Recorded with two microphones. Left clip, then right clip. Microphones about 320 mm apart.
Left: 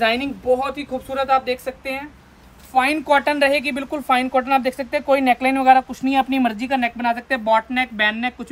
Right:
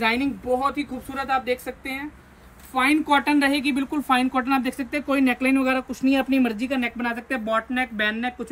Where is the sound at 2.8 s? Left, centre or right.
Centre.